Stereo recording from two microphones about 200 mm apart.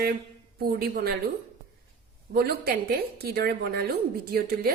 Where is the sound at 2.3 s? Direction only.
50° right (ahead or behind).